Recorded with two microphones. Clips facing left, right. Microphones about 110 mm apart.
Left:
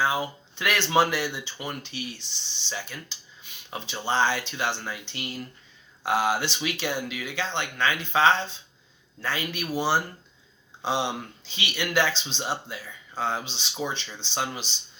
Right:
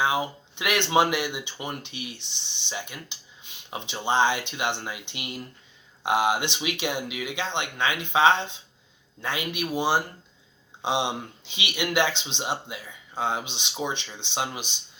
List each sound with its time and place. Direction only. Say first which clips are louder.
0.0 s speech: right 1 dB; 20° right (ahead or behind)